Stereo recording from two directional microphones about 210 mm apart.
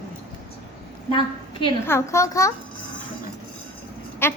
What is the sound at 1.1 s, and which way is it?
Speech, 25° left (ahead or behind).